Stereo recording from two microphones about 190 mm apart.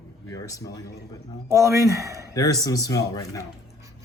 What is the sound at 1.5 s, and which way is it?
Speech, 15° right (ahead or behind).